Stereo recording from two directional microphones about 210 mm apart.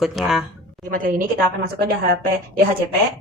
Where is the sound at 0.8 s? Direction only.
40° right (ahead or behind).